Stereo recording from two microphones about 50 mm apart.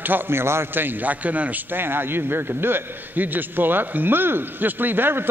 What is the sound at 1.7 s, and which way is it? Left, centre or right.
A man's voice, right.